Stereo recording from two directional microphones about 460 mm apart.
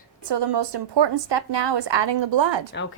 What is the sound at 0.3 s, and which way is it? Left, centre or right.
A woman's voice, right.